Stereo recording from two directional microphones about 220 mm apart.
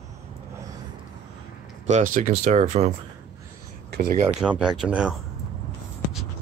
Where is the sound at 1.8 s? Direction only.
35° right (ahead or behind).